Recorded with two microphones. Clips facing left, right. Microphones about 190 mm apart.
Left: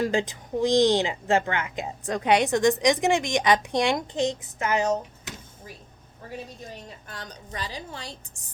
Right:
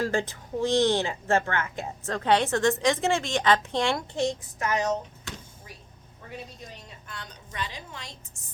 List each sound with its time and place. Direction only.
0.0 s speech: 15° left (ahead or behind)
7.1 s a woman's voice: 40° left (ahead or behind)